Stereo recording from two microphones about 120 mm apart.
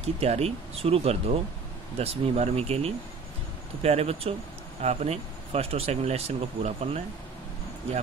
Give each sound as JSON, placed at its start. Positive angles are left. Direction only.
{"t": 0.0, "sound": "speech", "side_deg": -60}